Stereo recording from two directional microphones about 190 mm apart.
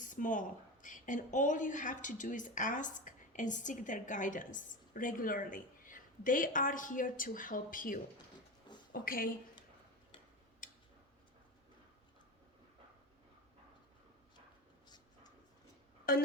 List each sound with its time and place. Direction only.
0.1 s a woman's voice: 45° left (ahead or behind)
10.6 s tick-tock: 45° left (ahead or behind)
14.8 s a sound: 20° left (ahead or behind)
16.1 s a woman's voice: 50° left (ahead or behind)